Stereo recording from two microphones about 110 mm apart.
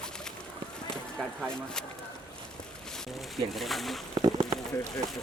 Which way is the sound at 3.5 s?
Centre (ahead or behind).